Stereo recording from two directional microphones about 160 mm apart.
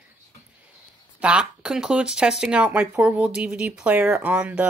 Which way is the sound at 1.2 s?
5° right (ahead or behind).